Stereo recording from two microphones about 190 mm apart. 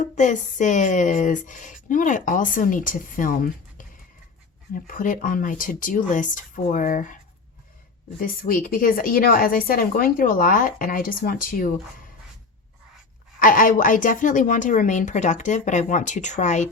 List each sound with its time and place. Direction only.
0.0 s speech: 40° left (ahead or behind)
8.2 s speech: 50° left (ahead or behind)
13.4 s a woman's voice: 45° left (ahead or behind)